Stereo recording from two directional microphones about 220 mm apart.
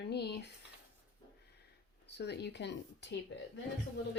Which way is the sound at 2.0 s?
50° left (ahead or behind).